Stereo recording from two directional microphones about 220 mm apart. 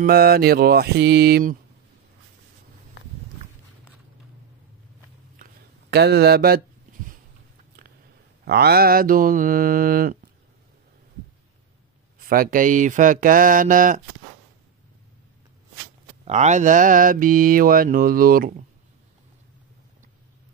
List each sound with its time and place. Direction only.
0.0 s mantra: 45° right (ahead or behind)
5.4 s a sound: 50° right (ahead or behind)
8.5 s mantra: 45° right (ahead or behind)
12.2 s mantra: 40° right (ahead or behind)
16.3 s mantra: 30° right (ahead or behind)